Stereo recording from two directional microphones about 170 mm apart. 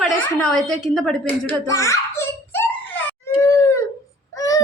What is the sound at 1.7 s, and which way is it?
Giggle, 20° left (ahead or behind).